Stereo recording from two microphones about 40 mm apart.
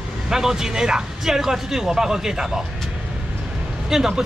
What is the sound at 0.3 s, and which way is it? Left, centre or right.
Speech, centre.